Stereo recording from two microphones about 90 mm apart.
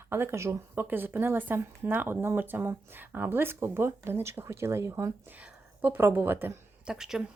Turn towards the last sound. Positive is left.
turn(degrees=-5)  # may be behind; listen again after turning